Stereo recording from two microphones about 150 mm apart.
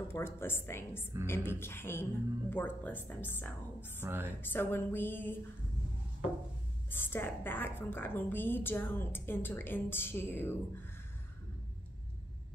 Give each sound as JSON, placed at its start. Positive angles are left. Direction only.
{"t": 0.1, "sound": "a woman's voice", "side_deg": 15}
{"t": 4.0, "sound": "speech", "side_deg": -15}
{"t": 4.4, "sound": "a woman's voice", "side_deg": 15}
{"t": 6.9, "sound": "a woman's voice", "side_deg": 15}